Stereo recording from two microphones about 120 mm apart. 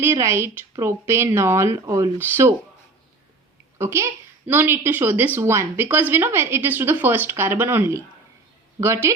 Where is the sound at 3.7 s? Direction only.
20° right (ahead or behind).